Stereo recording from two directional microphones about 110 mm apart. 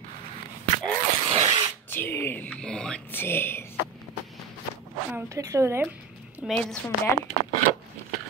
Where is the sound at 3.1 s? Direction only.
20° left (ahead or behind).